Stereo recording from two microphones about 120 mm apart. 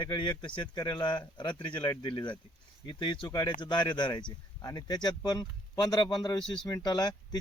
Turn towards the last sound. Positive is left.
turn(degrees=35)  # may be behind; listen again after turning